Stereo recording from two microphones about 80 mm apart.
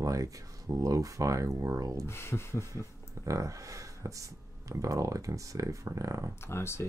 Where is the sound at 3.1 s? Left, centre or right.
Right.